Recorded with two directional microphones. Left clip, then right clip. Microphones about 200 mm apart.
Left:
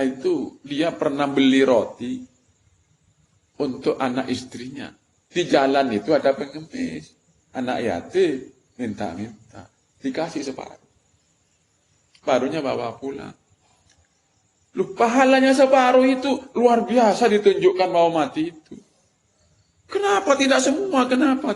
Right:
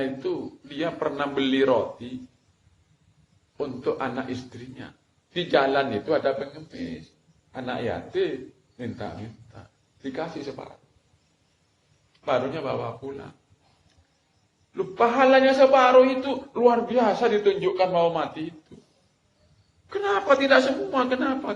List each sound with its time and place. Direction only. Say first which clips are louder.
0.0 s a man's voice: left 6 dB; 50° left (ahead or behind)
3.6 s a man's voice: left 5 dB; 50° left (ahead or behind)
7.5 s a man's voice: left 5 dB; 50° left (ahead or behind)
10.0 s a man's voice: left 6 dB; 50° left (ahead or behind)
12.2 s a man's voice: left 4 dB; 50° left (ahead or behind)
14.8 s a man's voice: left 2 dB; 50° left (ahead or behind)
19.9 s a man's voice: left 3 dB; 50° left (ahead or behind)